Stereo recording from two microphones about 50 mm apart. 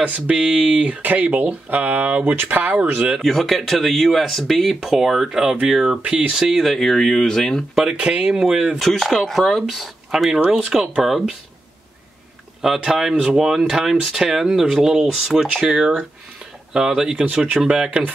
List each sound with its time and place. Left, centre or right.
0.4 s speech: centre
0.7 s speech: right
3.2 s speech: centre
6.3 s speech: centre
7.9 s speech: centre
8.8 s speech: centre
10.1 s speech: centre
12.6 s speech: centre